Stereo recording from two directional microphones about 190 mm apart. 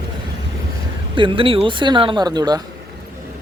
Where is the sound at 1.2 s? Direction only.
25° right (ahead or behind).